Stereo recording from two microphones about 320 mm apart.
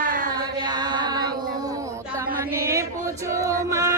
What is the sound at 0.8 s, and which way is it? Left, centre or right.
Music, centre.